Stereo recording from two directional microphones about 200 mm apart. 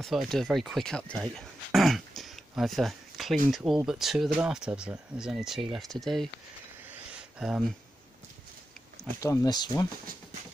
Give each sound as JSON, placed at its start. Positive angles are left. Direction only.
{"t": 0.0, "sound": "speech", "side_deg": 0}
{"t": 6.9, "sound": "a sound", "side_deg": -5}
{"t": 9.2, "sound": "speech", "side_deg": 15}